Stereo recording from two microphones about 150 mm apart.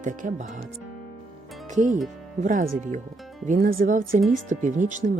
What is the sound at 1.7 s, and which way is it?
Speech, 60° right (ahead or behind).